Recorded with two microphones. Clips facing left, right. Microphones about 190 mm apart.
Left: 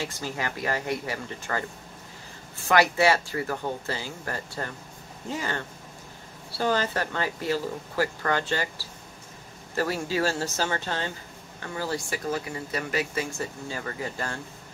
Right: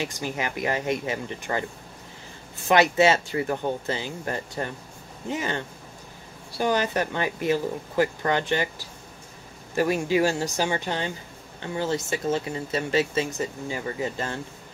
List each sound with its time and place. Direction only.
0.0 s speech: 20° right (ahead or behind)
2.7 s speech: 20° right (ahead or behind)
6.6 s speech: 15° right (ahead or behind)